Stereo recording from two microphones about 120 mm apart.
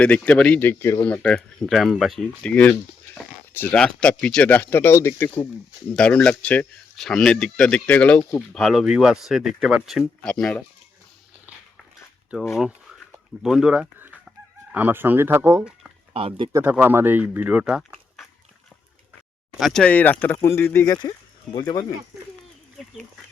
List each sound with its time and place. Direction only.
0.0 s speech: 10° left (ahead or behind)
5.9 s speech: 10° left (ahead or behind)
8.5 s speech: centre (ahead or behind)
12.5 s speech: 5° right (ahead or behind); by 15.6 s 25° right (ahead or behind)
16.1 s speech: 50° right (ahead or behind)
16.5 s speech: 20° right (ahead or behind)
19.5 s speech: centre (ahead or behind)
19.8 s speech: 15° left (ahead or behind); by 21.9 s 30° left (ahead or behind)